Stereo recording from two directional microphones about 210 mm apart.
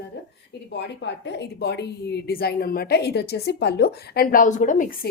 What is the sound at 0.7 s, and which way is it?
A woman's voice, 55° left (ahead or behind).